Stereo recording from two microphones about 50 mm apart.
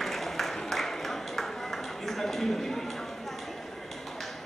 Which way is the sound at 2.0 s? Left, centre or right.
Centre.